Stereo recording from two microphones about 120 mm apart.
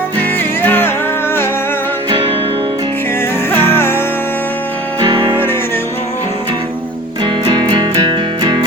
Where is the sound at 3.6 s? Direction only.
20° left (ahead or behind).